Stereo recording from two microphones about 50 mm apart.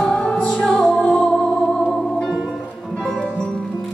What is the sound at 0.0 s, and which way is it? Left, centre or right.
Music, centre.